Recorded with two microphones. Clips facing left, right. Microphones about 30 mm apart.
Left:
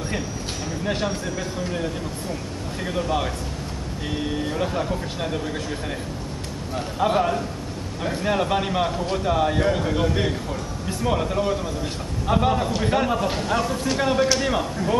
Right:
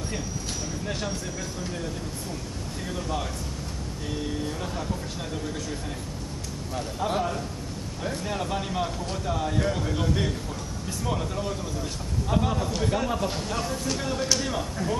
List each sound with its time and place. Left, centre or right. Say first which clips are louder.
1.6 s speech: left 7 dB; left
2.9 s speech: left 7 dB; left
7.0 s speech: left 7 dB; left
14.0 s speech: left 9 dB; left